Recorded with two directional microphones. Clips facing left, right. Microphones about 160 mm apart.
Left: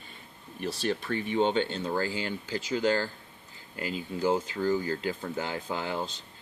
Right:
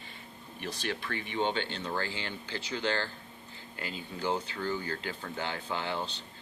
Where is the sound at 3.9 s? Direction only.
5° left (ahead or behind).